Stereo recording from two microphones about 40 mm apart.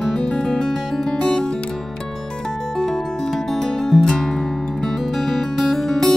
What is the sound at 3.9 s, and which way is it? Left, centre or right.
Music, centre.